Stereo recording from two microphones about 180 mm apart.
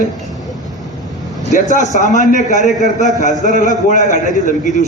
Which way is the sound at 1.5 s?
45° left (ahead or behind).